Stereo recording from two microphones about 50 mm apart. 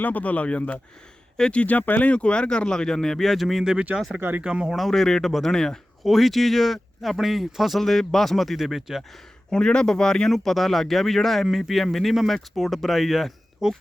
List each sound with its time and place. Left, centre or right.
0.0 s speech: left
2.0 s a man's voice: left; by 3.6 s centre
3.6 s speech: centre
4.7 s a man's voice: centre
9.5 s a man's voice: centre